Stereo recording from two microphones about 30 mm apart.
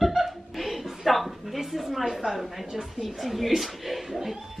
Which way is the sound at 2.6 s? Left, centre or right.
Centre.